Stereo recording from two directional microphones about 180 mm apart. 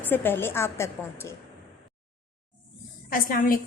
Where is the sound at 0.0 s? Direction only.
10° left (ahead or behind).